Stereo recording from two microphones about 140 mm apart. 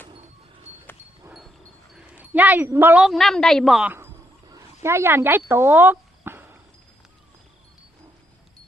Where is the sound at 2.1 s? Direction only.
10° right (ahead or behind).